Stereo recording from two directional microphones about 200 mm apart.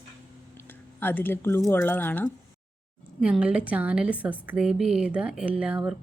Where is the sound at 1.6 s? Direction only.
10° left (ahead or behind).